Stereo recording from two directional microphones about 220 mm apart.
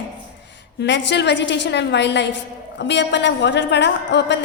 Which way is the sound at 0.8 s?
55° left (ahead or behind).